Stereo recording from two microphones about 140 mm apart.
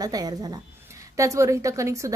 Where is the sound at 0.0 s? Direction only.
25° right (ahead or behind).